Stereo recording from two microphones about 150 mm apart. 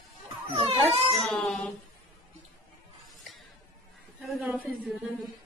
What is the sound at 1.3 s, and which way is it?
Music, 5° left (ahead or behind).